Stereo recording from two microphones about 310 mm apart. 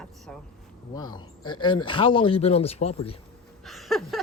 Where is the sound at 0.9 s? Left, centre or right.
Centre.